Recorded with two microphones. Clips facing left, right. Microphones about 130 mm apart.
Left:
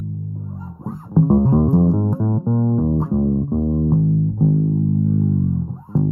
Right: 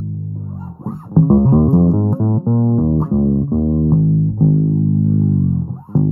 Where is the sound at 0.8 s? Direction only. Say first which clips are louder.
Right 3 dB; 30° right (ahead or behind).